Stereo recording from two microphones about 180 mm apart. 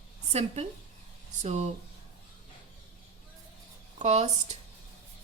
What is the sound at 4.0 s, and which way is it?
Speech, 40° right (ahead or behind).